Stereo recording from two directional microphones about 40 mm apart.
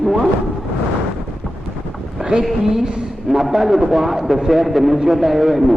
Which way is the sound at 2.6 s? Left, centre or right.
Centre.